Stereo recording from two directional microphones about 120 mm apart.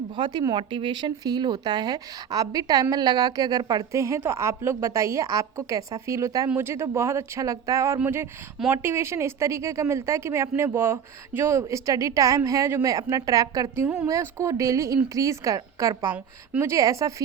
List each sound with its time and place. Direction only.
0.2 s a woman's voice: 35° right (ahead or behind)
13.8 s a woman's voice: 5° right (ahead or behind)
14.1 s a woman's voice: 25° right (ahead or behind)
16.1 s a woman's voice: 10° right (ahead or behind)
16.7 s a woman's voice: 25° right (ahead or behind)